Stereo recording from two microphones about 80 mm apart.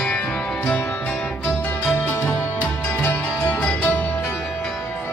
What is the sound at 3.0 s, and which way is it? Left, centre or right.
Music, centre.